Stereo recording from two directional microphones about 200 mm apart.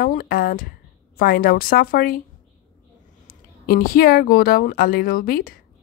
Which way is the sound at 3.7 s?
50° left (ahead or behind).